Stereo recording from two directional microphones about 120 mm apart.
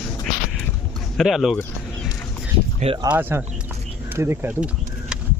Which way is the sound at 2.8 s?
65° right (ahead or behind).